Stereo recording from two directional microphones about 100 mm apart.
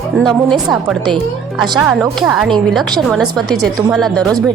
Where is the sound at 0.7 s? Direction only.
Centre (ahead or behind).